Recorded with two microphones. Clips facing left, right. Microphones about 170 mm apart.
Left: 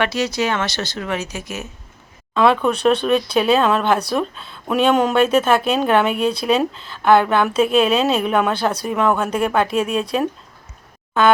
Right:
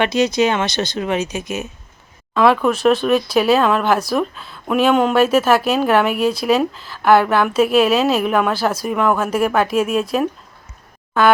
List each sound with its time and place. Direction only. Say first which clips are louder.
0.0 s speech: right 4 dB; 20° right (ahead or behind)
2.6 s a woman's voice: right 2 dB; 5° right (ahead or behind)
4.4 s speech: right 2 dB; 30° left (ahead or behind)
4.8 s a woman's voice: right 1 dB; centre (ahead or behind)